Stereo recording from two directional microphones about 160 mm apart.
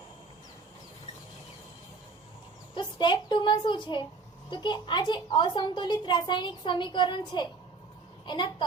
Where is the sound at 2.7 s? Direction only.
30° left (ahead or behind).